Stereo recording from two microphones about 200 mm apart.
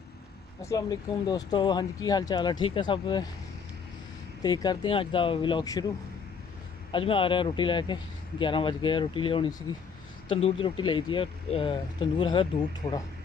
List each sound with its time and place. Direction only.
0.6 s speech: 15° left (ahead or behind)
4.4 s speech: 20° left (ahead or behind)
6.9 s speech: 25° left (ahead or behind)